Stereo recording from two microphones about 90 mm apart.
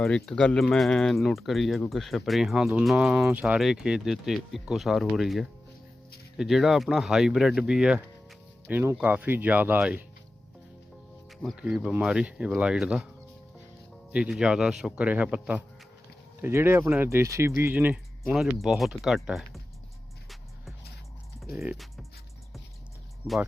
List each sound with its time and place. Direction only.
0.0 s speech: 5° left (ahead or behind); by 3.6 s 15° right (ahead or behind)
3.6 s speech: 5° right (ahead or behind)
8.6 s speech: 25° right (ahead or behind)
11.5 s speech: 10° right (ahead or behind)
14.1 s speech: 10° right (ahead or behind)
16.4 s speech: 25° right (ahead or behind)
18.3 s speech: 5° right (ahead or behind)
23.2 s speech: 15° right (ahead or behind)